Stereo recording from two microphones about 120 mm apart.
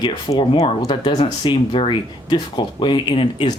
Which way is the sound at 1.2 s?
40° left (ahead or behind).